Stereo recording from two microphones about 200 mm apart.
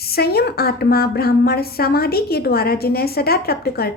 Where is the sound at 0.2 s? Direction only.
50° left (ahead or behind).